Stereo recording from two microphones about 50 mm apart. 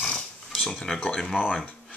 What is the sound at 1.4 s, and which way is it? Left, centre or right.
Speech, centre.